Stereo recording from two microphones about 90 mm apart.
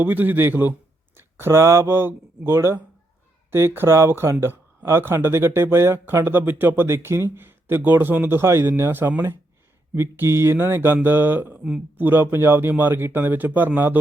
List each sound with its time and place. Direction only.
0.0 s speech: 20° right (ahead or behind)
11.6 s speech: 10° right (ahead or behind)
12.0 s speech: 25° right (ahead or behind)